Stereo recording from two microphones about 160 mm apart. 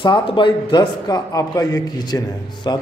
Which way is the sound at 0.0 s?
30° left (ahead or behind).